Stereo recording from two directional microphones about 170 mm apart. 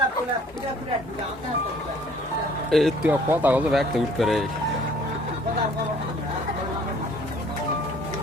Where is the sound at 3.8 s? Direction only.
Centre (ahead or behind).